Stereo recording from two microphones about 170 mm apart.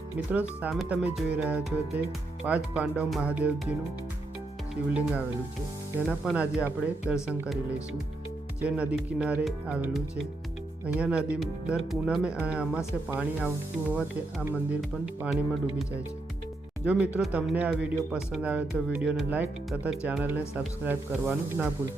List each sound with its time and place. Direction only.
0.3 s speech: 10° right (ahead or behind)
6.1 s speech: 10° right (ahead or behind)
8.6 s speech: 5° right (ahead or behind)